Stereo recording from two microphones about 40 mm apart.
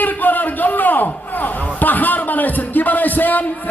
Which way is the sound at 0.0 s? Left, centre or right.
Left.